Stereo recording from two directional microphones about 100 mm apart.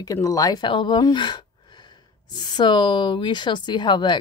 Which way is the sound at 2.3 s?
45° left (ahead or behind).